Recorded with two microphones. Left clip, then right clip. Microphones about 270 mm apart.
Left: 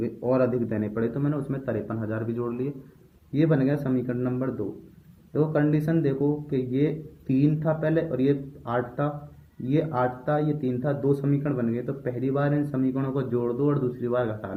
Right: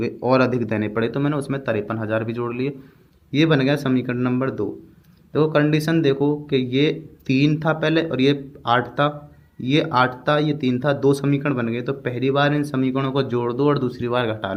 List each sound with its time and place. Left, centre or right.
0.0 s speech: right